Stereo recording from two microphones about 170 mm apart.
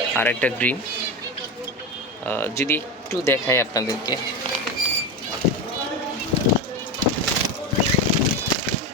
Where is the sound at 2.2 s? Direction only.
10° left (ahead or behind).